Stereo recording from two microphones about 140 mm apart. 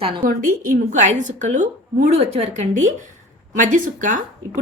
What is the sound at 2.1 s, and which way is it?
Speech, 45° right (ahead or behind).